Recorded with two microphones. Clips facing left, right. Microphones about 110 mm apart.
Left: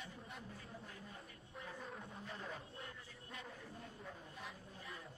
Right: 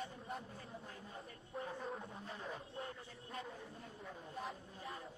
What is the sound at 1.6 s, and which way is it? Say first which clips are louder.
Speech: right 6 dB; 30° right (ahead or behind).